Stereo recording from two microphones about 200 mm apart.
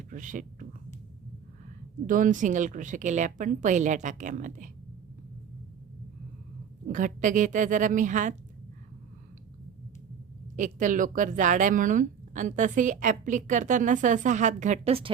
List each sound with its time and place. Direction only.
0.1 s speech: 40° right (ahead or behind)
2.0 s a woman's voice: 40° right (ahead or behind)
6.8 s a woman's voice: 40° right (ahead or behind)
10.6 s a woman's voice: 40° right (ahead or behind)